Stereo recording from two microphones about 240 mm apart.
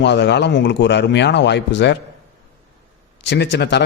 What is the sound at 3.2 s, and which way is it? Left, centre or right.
Speech, left.